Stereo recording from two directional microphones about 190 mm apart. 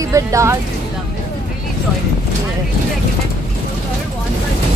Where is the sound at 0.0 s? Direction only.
15° right (ahead or behind).